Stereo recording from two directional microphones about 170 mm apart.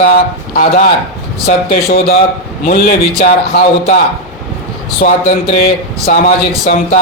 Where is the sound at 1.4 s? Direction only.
60° left (ahead or behind).